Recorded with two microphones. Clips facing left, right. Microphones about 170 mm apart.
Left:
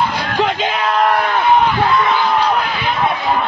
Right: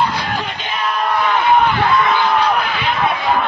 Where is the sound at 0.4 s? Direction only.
90° left.